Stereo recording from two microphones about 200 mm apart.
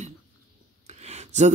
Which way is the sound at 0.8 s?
35° right (ahead or behind).